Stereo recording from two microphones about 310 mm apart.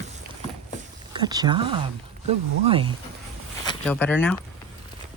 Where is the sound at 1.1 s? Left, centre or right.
Centre.